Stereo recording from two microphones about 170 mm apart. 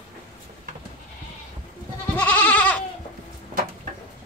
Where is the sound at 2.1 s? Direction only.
10° left (ahead or behind).